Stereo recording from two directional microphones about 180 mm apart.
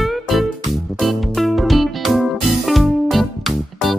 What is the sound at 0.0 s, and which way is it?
Music, centre (ahead or behind).